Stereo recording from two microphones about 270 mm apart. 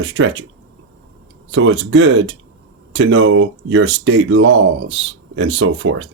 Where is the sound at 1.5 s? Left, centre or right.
Right.